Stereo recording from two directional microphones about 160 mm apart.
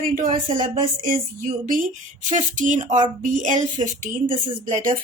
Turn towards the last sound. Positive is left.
turn(degrees=-55)  # may be behind; listen again after turning